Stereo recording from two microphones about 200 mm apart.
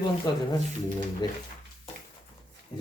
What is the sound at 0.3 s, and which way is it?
Speech, 20° left (ahead or behind).